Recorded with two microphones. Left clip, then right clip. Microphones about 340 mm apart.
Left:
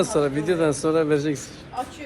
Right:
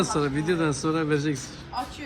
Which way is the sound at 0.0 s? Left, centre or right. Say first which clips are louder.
Left 4 dB; centre.